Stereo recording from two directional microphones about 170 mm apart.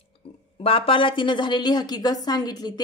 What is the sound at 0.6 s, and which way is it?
A woman's voice, 30° left (ahead or behind).